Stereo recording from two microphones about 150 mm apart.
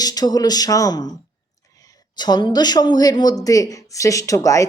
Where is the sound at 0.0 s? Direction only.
25° left (ahead or behind).